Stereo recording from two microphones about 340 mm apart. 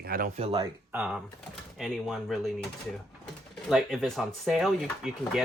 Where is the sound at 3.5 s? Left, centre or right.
Centre.